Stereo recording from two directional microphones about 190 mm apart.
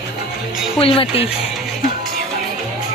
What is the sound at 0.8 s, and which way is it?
Speech, 30° left (ahead or behind).